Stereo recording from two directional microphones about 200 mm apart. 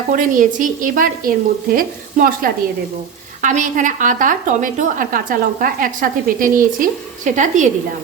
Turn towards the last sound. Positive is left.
turn(degrees=-40)  # may be behind; listen again after turning